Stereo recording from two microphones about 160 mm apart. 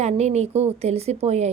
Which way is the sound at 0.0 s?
45° right (ahead or behind).